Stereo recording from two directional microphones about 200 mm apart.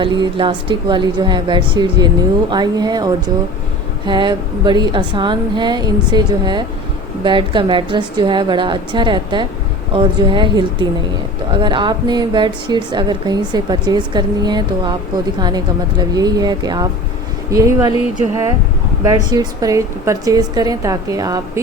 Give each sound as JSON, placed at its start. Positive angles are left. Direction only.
{"t": 0.0, "sound": "a woman's voice", "side_deg": -25}
{"t": 19.0, "sound": "a woman's voice", "side_deg": -20}